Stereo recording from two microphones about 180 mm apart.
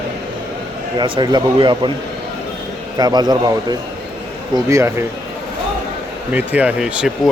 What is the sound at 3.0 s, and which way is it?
Speech, 20° right (ahead or behind).